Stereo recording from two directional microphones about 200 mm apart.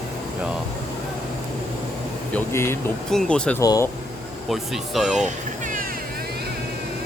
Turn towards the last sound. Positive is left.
turn(degrees=-40)  # may be behind; listen again after turning